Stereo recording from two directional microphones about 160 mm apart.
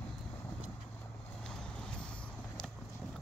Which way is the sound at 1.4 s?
5° left (ahead or behind).